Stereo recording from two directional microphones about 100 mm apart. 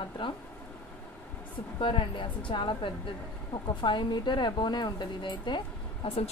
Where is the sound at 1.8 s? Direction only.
60° left (ahead or behind).